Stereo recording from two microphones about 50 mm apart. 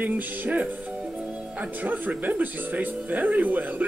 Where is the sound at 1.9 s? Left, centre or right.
Right.